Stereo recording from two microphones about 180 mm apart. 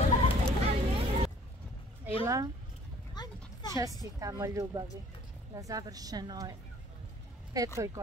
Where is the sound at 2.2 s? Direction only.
20° right (ahead or behind).